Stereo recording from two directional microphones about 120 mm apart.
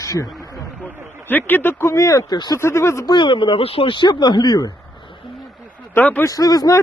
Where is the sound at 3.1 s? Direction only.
40° left (ahead or behind).